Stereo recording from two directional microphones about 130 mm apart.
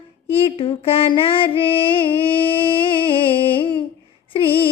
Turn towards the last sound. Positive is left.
turn(degrees=40)  # may be behind; listen again after turning